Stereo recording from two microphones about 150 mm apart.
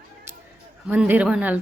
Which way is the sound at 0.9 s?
10° right (ahead or behind).